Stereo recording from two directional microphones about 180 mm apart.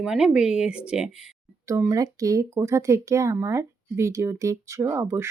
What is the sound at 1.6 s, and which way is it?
Speech, 15° right (ahead or behind).